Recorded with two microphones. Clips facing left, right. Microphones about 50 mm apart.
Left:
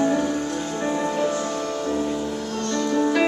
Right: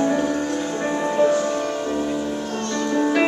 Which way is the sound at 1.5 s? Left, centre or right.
Right.